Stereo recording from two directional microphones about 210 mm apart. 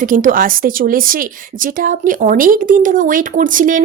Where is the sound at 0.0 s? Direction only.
40° right (ahead or behind).